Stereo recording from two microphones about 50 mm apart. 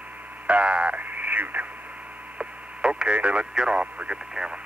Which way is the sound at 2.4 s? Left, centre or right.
Centre.